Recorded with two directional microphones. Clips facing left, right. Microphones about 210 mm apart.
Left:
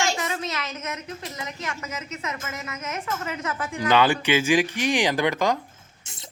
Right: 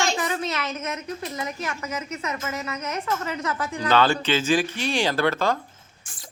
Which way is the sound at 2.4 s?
30° right (ahead or behind).